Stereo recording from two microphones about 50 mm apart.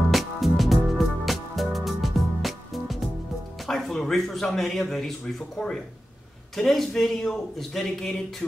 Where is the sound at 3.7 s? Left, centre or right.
Centre.